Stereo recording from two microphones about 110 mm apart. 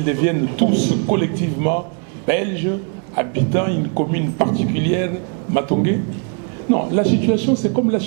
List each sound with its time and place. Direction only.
0.0 s a man's voice: 15° right (ahead or behind)